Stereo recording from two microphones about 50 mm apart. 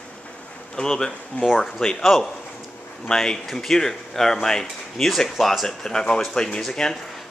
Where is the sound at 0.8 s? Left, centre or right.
Centre.